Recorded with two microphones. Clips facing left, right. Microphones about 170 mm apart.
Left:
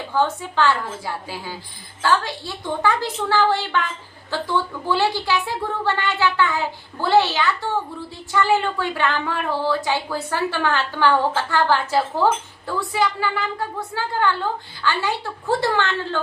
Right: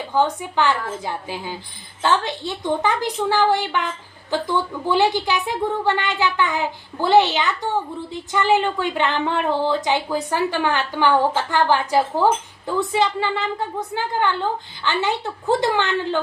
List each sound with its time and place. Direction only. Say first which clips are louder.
0.1 s a woman's voice: right 1 dB; 15° right (ahead or behind)